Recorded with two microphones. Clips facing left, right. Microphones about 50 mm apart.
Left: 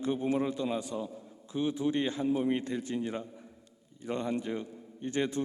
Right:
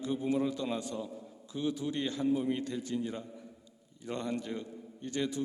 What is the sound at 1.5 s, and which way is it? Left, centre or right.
Speech, left.